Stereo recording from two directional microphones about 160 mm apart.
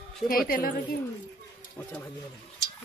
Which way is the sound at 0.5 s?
65° left (ahead or behind).